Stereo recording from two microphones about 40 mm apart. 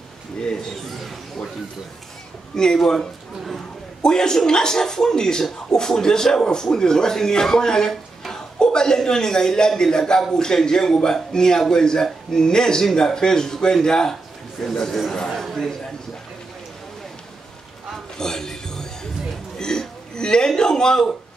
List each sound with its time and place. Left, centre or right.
0.9 s speech: centre
2.5 s a man's voice: centre
18.1 s a sound: centre